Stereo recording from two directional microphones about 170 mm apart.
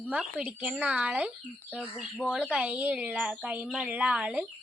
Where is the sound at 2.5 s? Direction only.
5° right (ahead or behind).